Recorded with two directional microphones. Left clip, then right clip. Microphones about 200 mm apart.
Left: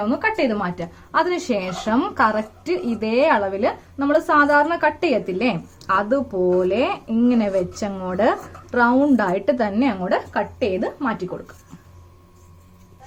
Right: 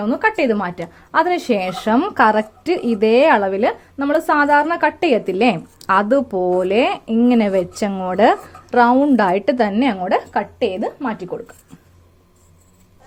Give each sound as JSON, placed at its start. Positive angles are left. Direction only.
{"t": 0.0, "sound": "a woman's voice", "side_deg": -40}
{"t": 10.8, "sound": "a woman's voice", "side_deg": -25}